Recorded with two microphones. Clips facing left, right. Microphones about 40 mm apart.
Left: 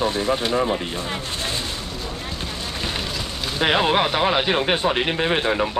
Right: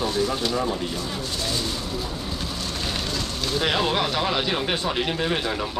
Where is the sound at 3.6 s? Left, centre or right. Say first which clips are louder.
Left 5 dB; left.